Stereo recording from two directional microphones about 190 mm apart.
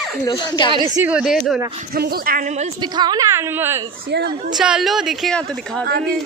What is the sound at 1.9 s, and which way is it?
Speech, 50° right (ahead or behind).